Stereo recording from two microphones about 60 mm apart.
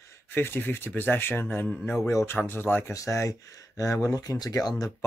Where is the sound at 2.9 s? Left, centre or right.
Left.